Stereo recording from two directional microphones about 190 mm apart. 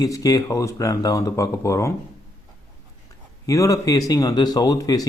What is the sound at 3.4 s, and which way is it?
A man's voice, 15° left (ahead or behind).